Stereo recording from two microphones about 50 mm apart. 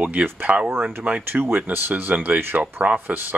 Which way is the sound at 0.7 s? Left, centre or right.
Right.